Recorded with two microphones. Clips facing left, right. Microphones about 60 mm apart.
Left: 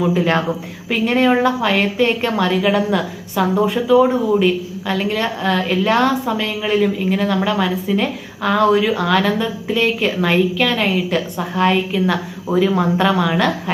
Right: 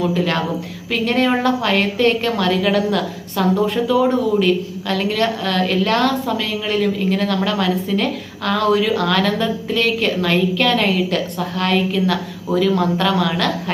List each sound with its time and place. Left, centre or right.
0.1 s a woman's voice: left